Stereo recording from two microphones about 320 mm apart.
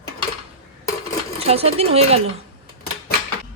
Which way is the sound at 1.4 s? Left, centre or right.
Centre.